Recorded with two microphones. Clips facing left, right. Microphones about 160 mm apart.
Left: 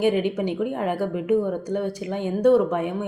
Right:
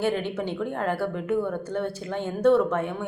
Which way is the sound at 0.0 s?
15° left (ahead or behind).